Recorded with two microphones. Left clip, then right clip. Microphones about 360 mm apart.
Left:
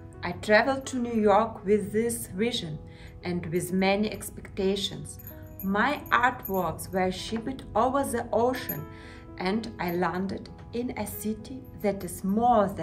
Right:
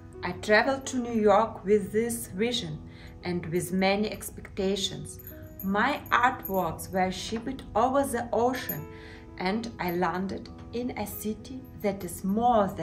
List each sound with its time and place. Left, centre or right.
0.2 s a woman's voice: centre